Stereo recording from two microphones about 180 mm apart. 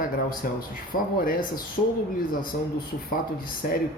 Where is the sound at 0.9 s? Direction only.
50° left (ahead or behind).